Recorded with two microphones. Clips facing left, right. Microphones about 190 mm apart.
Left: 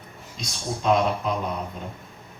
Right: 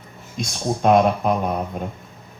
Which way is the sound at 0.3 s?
55° right (ahead or behind).